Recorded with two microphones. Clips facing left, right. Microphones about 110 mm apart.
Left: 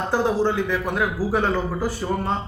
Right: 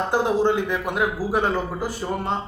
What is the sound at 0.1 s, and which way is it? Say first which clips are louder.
A man's voice: even; 20° right (ahead or behind).